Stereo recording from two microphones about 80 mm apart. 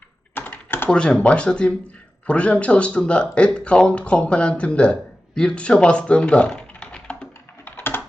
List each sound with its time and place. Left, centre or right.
0.4 s computer keyboard: left
0.9 s speech: centre